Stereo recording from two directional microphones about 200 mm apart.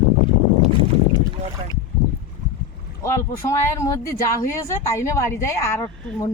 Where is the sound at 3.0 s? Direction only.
15° left (ahead or behind).